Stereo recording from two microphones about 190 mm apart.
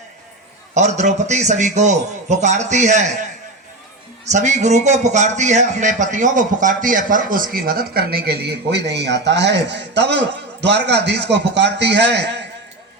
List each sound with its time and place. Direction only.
0.7 s a man's voice: 40° right (ahead or behind)
4.3 s a man's voice: 40° right (ahead or behind); by 12.4 s 65° right (ahead or behind)